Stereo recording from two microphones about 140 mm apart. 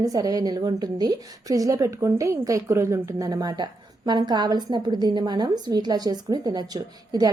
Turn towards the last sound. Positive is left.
turn(degrees=-30)  # may be behind; listen again after turning